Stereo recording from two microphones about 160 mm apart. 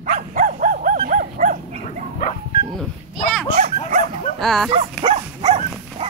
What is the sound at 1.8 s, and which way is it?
Dog, 50° left (ahead or behind).